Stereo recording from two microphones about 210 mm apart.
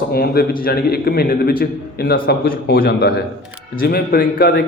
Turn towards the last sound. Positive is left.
turn(degrees=45)  # may be behind; listen again after turning